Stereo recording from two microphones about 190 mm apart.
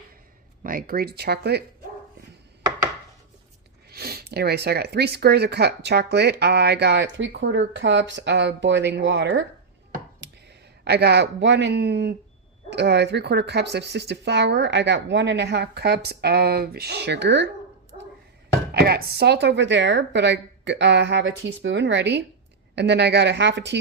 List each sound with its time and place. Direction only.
0.6 s speech: 50° right (ahead or behind)
3.8 s speech: 55° right (ahead or behind); by 9.5 s 75° right (ahead or behind)
10.2 s speech: 60° right (ahead or behind)
18.7 s speech: 55° right (ahead or behind)